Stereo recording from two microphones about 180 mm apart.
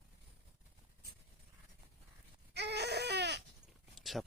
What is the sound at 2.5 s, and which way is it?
Baby cry, 70° right (ahead or behind).